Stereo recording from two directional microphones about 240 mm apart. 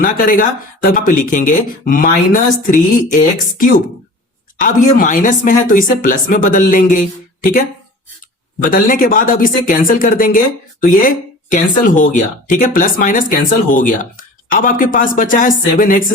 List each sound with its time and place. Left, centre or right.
0.0 s speech: left
4.6 s speech: left
8.6 s speech: left